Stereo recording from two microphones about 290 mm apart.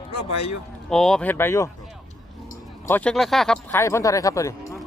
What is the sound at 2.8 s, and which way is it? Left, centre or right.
Speech, centre.